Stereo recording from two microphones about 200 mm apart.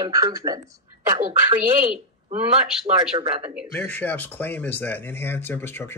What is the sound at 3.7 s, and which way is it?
Speech, 10° left (ahead or behind).